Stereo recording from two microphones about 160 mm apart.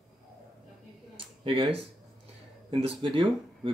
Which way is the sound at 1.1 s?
35° right (ahead or behind).